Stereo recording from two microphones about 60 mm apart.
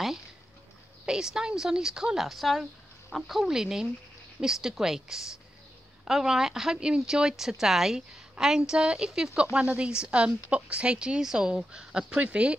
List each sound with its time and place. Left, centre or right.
1.0 s speech: centre